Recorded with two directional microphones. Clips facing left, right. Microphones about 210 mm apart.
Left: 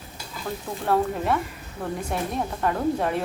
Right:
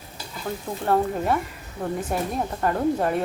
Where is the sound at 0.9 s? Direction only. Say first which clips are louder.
Right 1 dB; centre (ahead or behind).